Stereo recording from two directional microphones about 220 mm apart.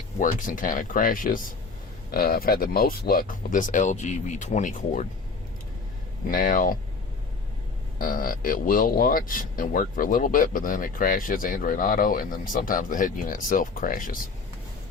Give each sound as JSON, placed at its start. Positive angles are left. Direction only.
{"t": 0.2, "sound": "speech", "side_deg": 35}
{"t": 6.2, "sound": "speech", "side_deg": 40}
{"t": 7.9, "sound": "speech", "side_deg": 40}